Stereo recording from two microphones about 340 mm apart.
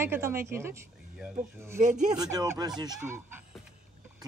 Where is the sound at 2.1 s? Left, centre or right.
Centre.